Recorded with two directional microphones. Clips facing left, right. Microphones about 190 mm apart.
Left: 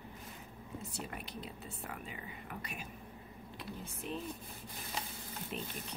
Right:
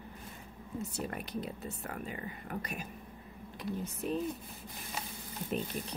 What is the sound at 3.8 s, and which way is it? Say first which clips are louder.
Speech: right 6 dB; 40° right (ahead or behind).